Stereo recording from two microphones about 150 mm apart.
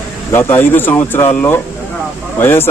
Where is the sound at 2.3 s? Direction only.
15° left (ahead or behind).